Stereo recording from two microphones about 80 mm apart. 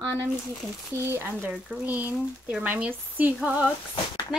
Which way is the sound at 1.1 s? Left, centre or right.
Right.